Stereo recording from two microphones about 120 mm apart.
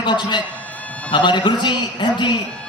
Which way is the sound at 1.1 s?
40° left (ahead or behind).